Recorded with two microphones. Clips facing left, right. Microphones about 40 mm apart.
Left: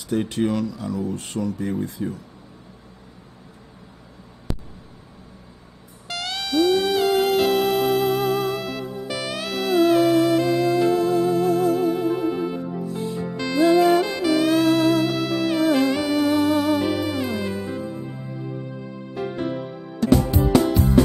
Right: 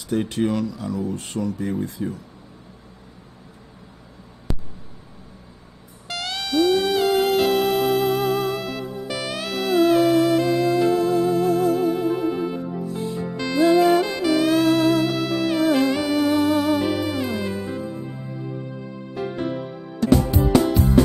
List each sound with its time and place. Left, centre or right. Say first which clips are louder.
0.0 s speech: even; centre
4.5 s a sound: even; centre
6.0 s music: even; centre